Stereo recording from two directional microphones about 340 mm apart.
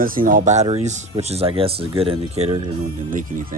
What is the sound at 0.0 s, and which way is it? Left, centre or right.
Speech, right.